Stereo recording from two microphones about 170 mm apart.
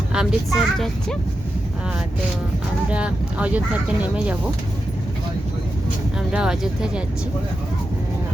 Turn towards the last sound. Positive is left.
turn(degrees=-5)  # may be behind; listen again after turning